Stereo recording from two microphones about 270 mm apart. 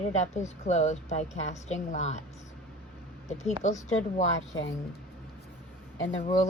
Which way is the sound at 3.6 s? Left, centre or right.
Left.